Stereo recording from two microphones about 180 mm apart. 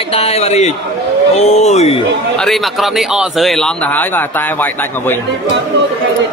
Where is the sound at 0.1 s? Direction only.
35° left (ahead or behind).